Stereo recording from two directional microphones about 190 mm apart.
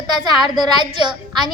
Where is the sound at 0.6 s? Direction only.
25° right (ahead or behind).